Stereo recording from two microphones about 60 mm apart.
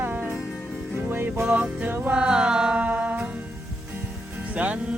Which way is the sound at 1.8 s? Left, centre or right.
Right.